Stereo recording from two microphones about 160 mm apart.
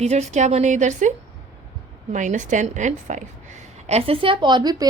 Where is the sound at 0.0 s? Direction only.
45° right (ahead or behind).